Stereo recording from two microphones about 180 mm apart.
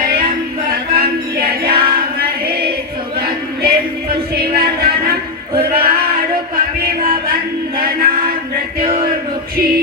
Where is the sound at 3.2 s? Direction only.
55° right (ahead or behind).